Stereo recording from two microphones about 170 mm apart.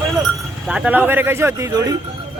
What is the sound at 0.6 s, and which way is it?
Speech, 5° right (ahead or behind).